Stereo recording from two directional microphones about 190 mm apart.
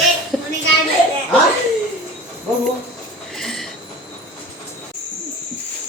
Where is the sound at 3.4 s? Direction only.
Centre (ahead or behind).